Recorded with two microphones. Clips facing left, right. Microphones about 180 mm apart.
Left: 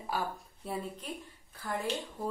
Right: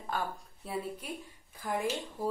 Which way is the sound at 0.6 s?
5° right (ahead or behind).